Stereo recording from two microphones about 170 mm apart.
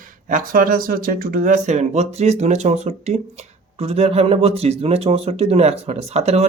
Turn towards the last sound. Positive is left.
turn(degrees=-40)  # may be behind; listen again after turning